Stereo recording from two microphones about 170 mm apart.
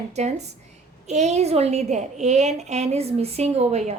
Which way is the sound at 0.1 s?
40° right (ahead or behind).